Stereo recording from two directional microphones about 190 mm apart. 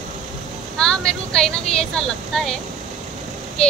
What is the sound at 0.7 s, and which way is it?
A woman's voice, 5° left (ahead or behind).